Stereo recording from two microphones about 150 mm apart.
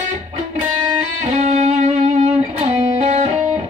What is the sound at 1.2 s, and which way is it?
Music, 50° right (ahead or behind).